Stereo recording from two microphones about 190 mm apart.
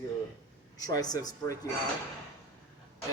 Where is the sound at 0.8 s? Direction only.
20° left (ahead or behind).